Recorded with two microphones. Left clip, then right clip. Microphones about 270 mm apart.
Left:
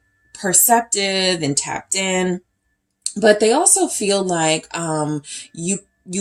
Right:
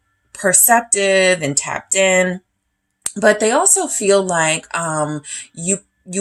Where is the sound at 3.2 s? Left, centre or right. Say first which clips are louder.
Even; right.